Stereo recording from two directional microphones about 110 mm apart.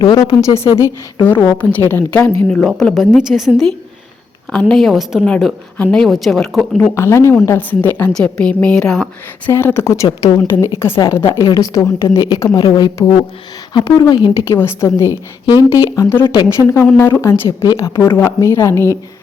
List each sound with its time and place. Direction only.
0.0 s a woman's voice: 45° left (ahead or behind)
0.8 s a woman's voice: 20° left (ahead or behind)
2.5 s a woman's voice: 5° left (ahead or behind)
4.7 s a woman's voice: centre (ahead or behind)
5.2 s a woman's voice: 10° left (ahead or behind)
6.9 s a woman's voice: 25° left (ahead or behind); by 9.0 s 5° left (ahead or behind)
9.5 s speech: 20° left (ahead or behind)
11.3 s a woman's voice: 35° left (ahead or behind)
14.4 s speech: 25° left (ahead or behind)
15.0 s a woman's voice: 20° right (ahead or behind)
15.7 s speech: 30° left (ahead or behind)